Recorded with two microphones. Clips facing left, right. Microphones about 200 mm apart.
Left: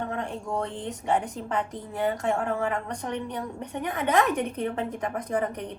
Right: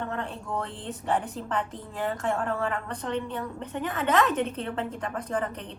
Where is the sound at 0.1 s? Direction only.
15° left (ahead or behind).